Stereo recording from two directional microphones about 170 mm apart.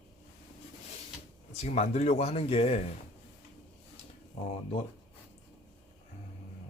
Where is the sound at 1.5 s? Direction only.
40° left (ahead or behind).